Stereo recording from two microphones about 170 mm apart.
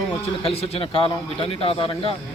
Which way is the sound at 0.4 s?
35° left (ahead or behind).